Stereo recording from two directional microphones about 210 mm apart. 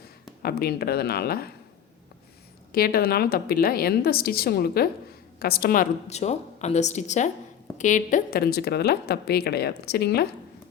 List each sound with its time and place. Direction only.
0.4 s a woman's voice: 45° left (ahead or behind)
2.7 s a woman's voice: 45° left (ahead or behind)